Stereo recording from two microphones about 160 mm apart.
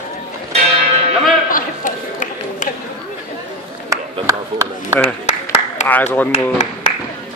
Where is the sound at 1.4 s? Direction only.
55° left (ahead or behind).